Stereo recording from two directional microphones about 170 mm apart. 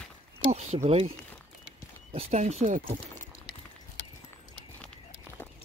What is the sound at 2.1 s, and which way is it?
Speech, 40° right (ahead or behind).